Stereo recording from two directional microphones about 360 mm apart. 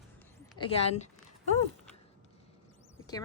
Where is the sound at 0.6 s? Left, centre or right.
Centre.